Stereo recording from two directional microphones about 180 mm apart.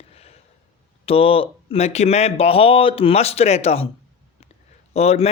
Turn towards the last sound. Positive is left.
turn(degrees=35)  # may be behind; listen again after turning